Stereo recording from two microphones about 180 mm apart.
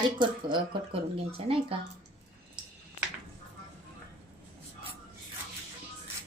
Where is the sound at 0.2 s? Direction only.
25° right (ahead or behind).